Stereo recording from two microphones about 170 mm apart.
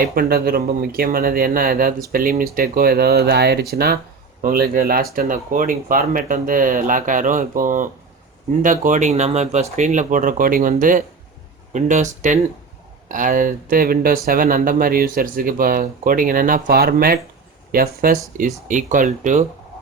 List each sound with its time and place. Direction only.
0.0 s speech: 60° right (ahead or behind)